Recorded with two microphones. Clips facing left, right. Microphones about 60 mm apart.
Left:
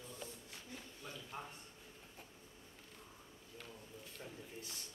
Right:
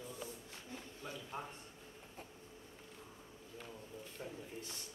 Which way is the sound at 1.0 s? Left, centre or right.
Centre.